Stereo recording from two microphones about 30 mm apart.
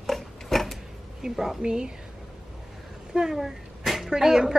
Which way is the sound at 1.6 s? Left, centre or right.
Right.